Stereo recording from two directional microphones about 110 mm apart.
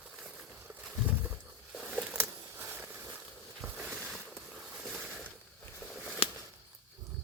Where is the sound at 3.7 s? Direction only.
10° right (ahead or behind).